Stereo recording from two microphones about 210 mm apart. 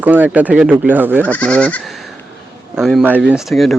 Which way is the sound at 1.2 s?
5° left (ahead or behind).